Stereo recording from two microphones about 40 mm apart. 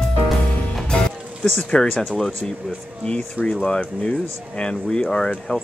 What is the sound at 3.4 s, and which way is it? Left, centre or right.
Speech, right.